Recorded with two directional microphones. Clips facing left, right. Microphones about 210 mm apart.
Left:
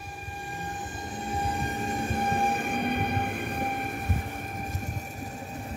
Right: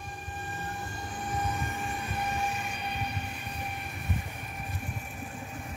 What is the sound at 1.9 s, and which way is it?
Train, 45° left (ahead or behind).